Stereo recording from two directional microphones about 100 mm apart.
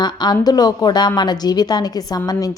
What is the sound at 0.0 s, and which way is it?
A woman's voice, 45° left (ahead or behind).